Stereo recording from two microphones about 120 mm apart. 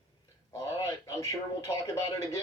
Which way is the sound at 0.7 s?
30° left (ahead or behind).